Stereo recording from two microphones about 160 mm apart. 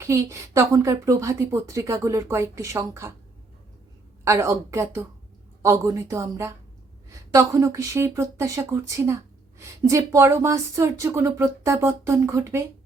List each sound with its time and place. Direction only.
0.0 s a woman's voice: 20° right (ahead or behind)
4.2 s a woman's voice: 20° right (ahead or behind)